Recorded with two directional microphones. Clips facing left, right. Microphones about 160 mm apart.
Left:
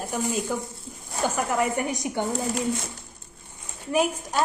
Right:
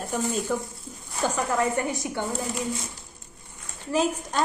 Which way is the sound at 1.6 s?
15° left (ahead or behind).